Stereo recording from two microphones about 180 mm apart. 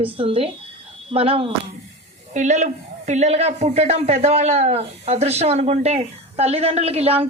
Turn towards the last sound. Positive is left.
turn(degrees=-35)  # may be behind; listen again after turning